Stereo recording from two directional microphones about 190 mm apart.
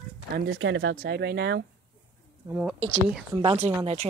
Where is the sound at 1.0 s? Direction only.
60° right (ahead or behind).